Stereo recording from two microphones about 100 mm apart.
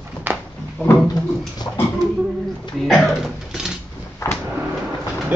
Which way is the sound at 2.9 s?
Centre (ahead or behind).